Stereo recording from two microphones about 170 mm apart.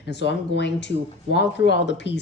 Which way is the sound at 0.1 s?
90° left.